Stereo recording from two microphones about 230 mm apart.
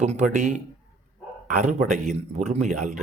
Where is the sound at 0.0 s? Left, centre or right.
Right.